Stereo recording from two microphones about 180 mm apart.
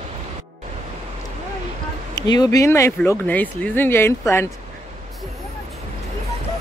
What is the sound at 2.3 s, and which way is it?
Speech, 20° left (ahead or behind).